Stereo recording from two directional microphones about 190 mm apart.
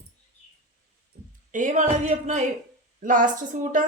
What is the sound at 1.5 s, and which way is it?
A woman's voice, 40° right (ahead or behind).